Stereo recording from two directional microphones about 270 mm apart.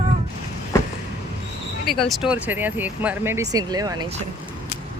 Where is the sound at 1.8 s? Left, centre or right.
Centre.